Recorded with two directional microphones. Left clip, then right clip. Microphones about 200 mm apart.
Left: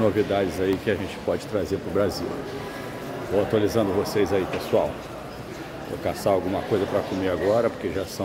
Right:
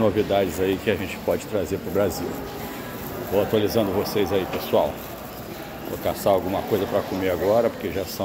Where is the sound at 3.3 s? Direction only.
15° left (ahead or behind).